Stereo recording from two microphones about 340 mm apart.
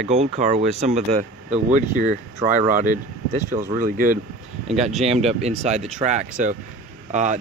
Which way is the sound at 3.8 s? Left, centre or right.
Right.